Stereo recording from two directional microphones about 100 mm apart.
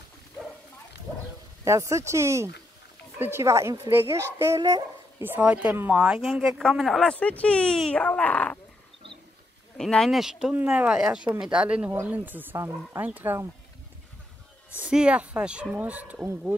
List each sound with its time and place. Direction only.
1.6 s speech: 30° right (ahead or behind)
4.6 s speech: 45° right (ahead or behind)
5.2 s speech: 15° right (ahead or behind); by 7.2 s centre (ahead or behind)
7.2 s speech: 15° left (ahead or behind)
9.8 s speech: 5° left (ahead or behind)
10.5 s speech: 15° right (ahead or behind)
14.8 s speech: 10° right (ahead or behind)